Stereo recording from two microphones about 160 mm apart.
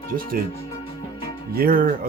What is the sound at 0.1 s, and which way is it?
Speech, 65° right (ahead or behind).